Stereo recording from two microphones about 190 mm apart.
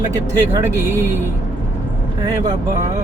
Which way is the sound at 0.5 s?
15° right (ahead or behind).